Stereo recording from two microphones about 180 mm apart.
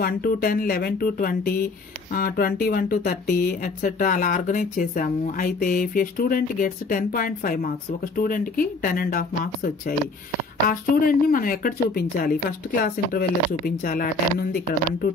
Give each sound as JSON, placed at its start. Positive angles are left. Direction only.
{"t": 0.0, "sound": "speech", "side_deg": 55}